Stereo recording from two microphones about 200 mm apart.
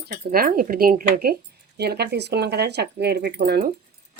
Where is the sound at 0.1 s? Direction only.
45° right (ahead or behind).